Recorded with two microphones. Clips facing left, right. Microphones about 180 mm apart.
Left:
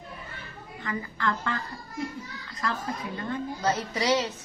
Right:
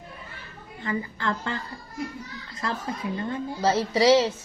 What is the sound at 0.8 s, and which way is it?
Speech, 30° right (ahead or behind).